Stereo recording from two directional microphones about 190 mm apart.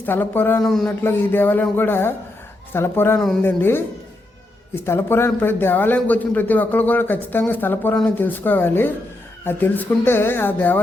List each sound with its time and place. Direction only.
0.0 s a man's voice: 10° left (ahead or behind)